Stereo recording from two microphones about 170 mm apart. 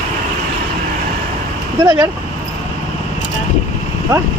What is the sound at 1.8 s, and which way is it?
Speech, 20° right (ahead or behind).